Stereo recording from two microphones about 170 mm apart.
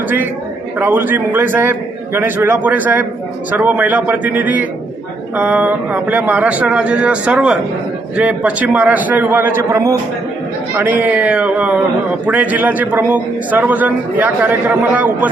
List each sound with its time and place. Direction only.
0.8 s a man's voice: 10° right (ahead or behind)